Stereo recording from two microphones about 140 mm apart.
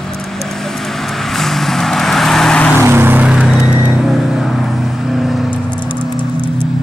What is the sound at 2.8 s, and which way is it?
Vehicle, 15° right (ahead or behind).